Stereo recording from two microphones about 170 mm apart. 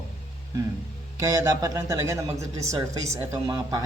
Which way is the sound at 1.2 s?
20° right (ahead or behind).